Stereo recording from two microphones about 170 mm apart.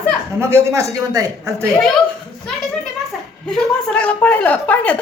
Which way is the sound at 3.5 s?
5° left (ahead or behind).